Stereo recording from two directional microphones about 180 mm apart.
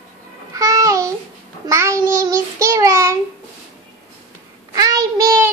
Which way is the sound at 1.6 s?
15° right (ahead or behind).